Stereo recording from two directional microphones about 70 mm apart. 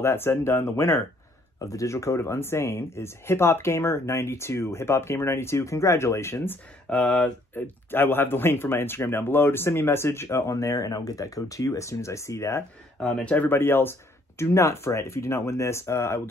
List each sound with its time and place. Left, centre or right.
0.0 s speech: left
1.6 s speech: left
6.9 s speech: centre
7.5 s speech: left
13.0 s speech: centre
13.5 s speech: left
14.4 s speech: left